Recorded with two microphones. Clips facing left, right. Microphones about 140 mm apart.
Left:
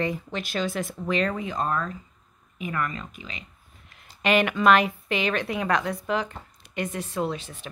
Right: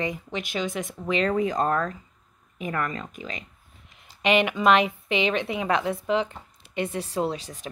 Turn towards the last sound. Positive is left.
turn(degrees=-40)  # may be behind; listen again after turning